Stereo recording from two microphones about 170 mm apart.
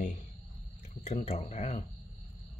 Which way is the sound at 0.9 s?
40° left (ahead or behind).